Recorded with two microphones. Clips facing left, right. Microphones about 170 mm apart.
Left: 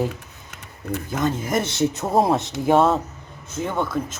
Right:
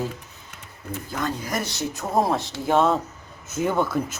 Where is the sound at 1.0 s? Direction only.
20° left (ahead or behind).